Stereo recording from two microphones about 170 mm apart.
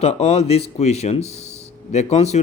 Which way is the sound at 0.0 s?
40° left (ahead or behind).